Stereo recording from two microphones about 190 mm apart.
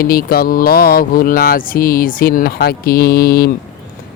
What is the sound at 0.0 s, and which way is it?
Speech, 50° left (ahead or behind).